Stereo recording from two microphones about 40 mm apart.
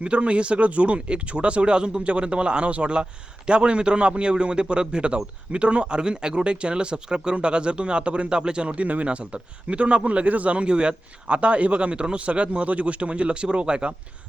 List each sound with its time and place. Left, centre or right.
0.0 s speech: right